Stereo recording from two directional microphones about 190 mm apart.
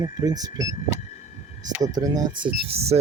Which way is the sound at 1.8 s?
20° right (ahead or behind).